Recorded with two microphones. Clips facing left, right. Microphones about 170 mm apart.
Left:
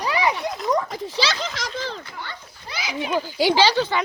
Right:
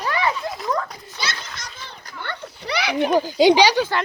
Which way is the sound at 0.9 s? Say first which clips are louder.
Left 7 dB; 90° left.